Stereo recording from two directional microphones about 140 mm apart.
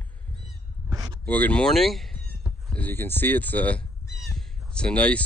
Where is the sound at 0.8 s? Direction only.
30° right (ahead or behind).